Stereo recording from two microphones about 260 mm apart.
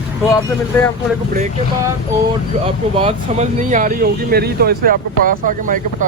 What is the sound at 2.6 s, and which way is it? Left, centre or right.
Speech, right.